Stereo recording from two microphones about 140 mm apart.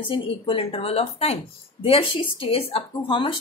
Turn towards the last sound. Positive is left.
turn(degrees=40)  # may be behind; listen again after turning